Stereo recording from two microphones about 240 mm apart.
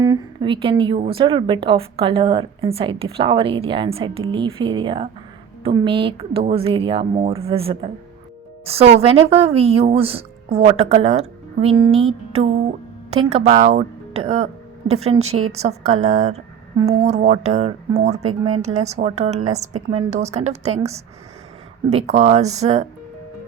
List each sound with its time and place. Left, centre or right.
0.0 s a woman's voice: centre
18.8 s speech: right